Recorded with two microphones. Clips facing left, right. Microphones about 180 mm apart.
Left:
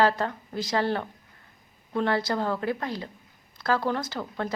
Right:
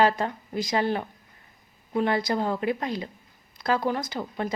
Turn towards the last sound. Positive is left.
turn(degrees=-15)  # may be behind; listen again after turning